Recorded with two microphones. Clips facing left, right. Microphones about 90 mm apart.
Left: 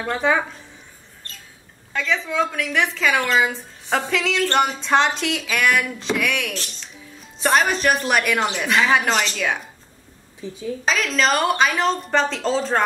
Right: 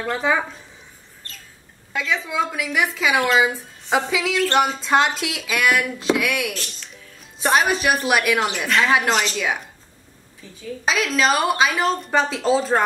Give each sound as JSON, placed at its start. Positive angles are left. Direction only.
{"t": 0.0, "sound": "speech", "side_deg": 0}
{"t": 1.9, "sound": "speech", "side_deg": -5}
{"t": 10.4, "sound": "a woman's voice", "side_deg": 20}
{"t": 10.9, "sound": "speech", "side_deg": -5}